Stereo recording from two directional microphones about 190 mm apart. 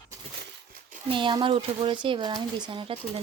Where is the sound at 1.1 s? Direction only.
25° right (ahead or behind).